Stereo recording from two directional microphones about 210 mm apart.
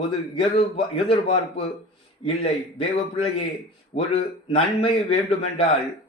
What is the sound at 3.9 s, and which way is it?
A man's voice, 30° left (ahead or behind).